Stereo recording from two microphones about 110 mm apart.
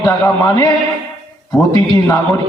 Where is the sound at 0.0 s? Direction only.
30° left (ahead or behind).